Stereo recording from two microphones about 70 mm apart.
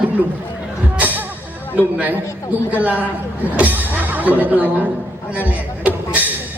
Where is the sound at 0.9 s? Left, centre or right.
Right.